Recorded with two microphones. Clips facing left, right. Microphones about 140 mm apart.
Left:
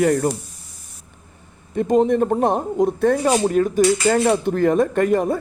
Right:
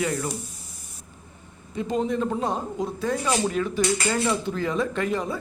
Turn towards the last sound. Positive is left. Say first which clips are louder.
# left 8 dB
turn(degrees=50)  # may be behind; listen again after turning